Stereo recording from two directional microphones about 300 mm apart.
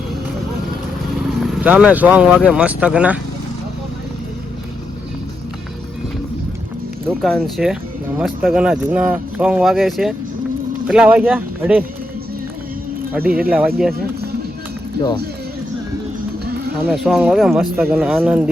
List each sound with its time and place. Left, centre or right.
1.5 s speech: centre
7.1 s speech: centre
13.1 s speech: centre
16.5 s a sound: right
16.9 s speech: centre